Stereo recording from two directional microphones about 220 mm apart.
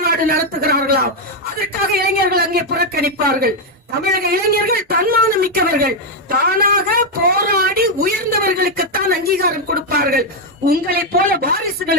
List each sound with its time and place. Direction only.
0.0 s a man's voice: 45° right (ahead or behind)